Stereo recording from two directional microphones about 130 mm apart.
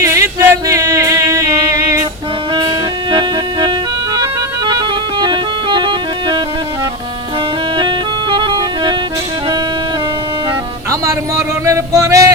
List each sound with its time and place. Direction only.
0.0 s a capella: 20° right (ahead or behind)
3.1 s music: 35° right (ahead or behind)
7.8 s music: 40° right (ahead or behind)
11.0 s a sound: 25° right (ahead or behind)